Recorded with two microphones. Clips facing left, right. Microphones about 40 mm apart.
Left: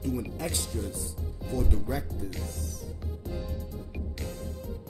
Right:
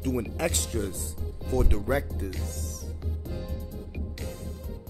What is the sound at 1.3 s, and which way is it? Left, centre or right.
Music, right.